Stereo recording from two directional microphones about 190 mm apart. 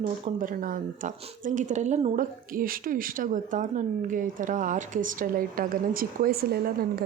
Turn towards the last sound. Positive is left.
turn(degrees=-50)  # may be behind; listen again after turning